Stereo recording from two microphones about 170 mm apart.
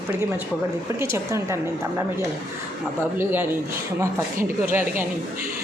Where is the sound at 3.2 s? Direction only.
10° right (ahead or behind).